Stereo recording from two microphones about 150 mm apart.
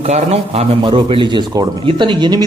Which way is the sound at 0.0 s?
45° right (ahead or behind).